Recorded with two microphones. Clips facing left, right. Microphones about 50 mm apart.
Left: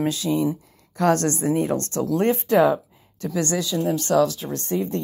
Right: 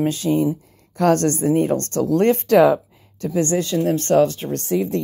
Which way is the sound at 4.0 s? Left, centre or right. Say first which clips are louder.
Right 3 dB; right.